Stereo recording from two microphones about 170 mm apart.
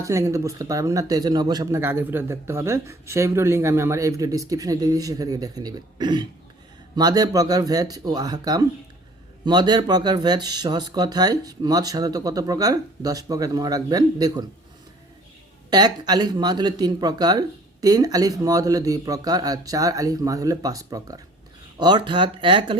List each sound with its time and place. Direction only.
0.0 s speech: 20° right (ahead or behind)
15.7 s speech: 25° right (ahead or behind)